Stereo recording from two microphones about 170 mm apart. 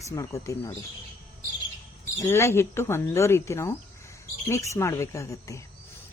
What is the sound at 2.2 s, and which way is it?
Speech, 15° left (ahead or behind).